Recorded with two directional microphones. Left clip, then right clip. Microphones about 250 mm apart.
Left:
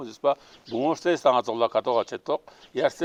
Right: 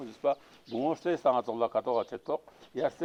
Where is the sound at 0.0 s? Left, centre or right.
Centre.